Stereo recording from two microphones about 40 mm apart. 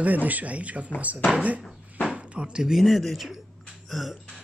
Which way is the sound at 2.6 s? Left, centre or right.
Centre.